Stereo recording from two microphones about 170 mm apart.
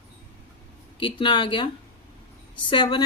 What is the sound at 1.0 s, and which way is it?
Speech, 30° left (ahead or behind).